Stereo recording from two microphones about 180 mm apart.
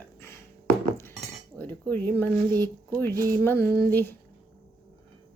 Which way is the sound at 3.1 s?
20° right (ahead or behind).